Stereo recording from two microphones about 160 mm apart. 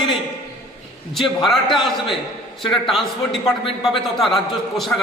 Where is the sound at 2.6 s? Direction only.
30° left (ahead or behind).